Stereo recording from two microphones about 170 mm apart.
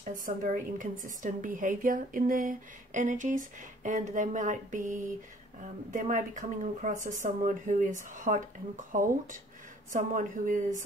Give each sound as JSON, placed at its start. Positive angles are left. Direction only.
{"t": 0.0, "sound": "speech", "side_deg": -50}